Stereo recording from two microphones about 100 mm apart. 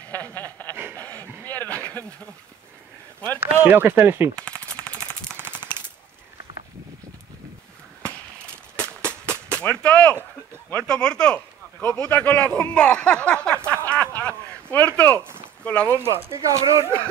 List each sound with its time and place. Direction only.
0.1 s snicker: 20° left (ahead or behind)
0.9 s a sound: 15° left (ahead or behind)
3.6 s speech: 20° right (ahead or behind)
4.4 s machine gun: 15° left (ahead or behind)
5.5 s machine gun: 45° left (ahead or behind)
8.7 s a sound: 10° left (ahead or behind)
9.6 s speech: 15° left (ahead or behind)
13.7 s a sound: 15° left (ahead or behind)
15.6 s speech: 10° left (ahead or behind)
15.9 s speech: 25° right (ahead or behind)